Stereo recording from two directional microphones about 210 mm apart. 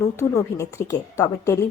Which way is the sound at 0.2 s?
15° left (ahead or behind).